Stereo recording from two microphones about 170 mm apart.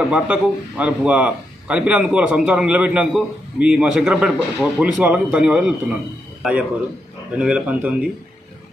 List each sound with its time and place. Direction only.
0.1 s a man's voice: 5° right (ahead or behind)
7.3 s a man's voice: 5° right (ahead or behind)